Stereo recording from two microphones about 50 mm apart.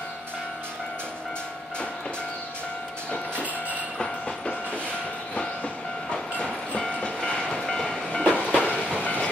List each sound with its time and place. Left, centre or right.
6.8 s train: centre
8.5 s train: left